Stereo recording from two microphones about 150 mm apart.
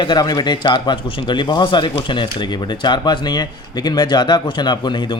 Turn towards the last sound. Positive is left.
turn(degrees=30)  # may be behind; listen again after turning